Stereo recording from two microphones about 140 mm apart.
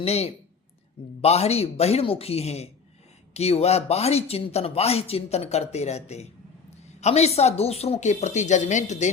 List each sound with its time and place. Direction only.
0.0 s a man's voice: 45° left (ahead or behind)